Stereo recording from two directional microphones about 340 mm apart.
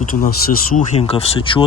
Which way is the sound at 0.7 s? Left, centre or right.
Centre.